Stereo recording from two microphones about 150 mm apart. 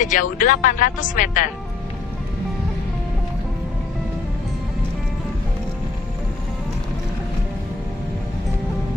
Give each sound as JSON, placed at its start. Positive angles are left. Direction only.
{"t": 0.0, "sound": "speech", "side_deg": 60}